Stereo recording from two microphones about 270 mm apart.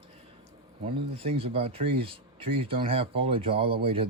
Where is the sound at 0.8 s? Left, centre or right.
Right.